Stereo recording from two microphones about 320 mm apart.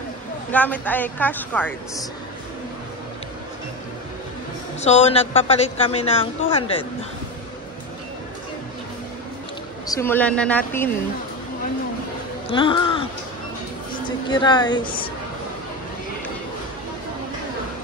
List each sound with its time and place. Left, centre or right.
0.5 s a woman's voice: centre
4.7 s a woman's voice: left
9.8 s a woman's voice: centre
12.4 s speech: centre
14.0 s a woman's voice: centre